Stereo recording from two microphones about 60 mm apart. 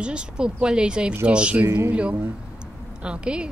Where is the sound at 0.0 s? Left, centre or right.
Centre.